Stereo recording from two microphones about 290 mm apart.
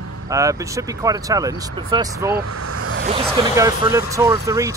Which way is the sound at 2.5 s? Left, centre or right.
Right.